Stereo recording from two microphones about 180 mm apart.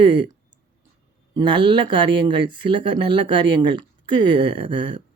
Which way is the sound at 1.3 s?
25° right (ahead or behind).